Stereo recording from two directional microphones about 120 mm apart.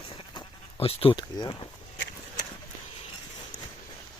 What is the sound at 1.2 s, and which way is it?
Speech, 35° left (ahead or behind).